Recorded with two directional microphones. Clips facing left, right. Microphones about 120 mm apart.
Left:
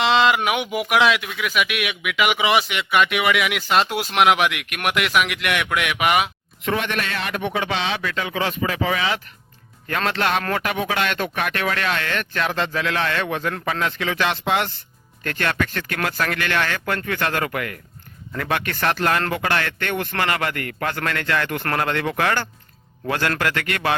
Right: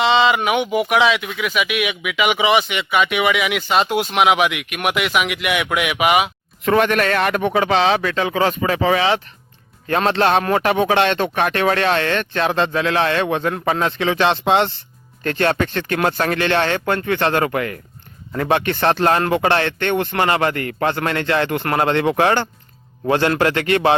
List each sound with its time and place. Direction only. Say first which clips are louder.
0.0 s speech: right 2 dB; centre (ahead or behind)
6.7 s speech: right 8 dB; 50° right (ahead or behind); by 24.0 s 25° right (ahead or behind)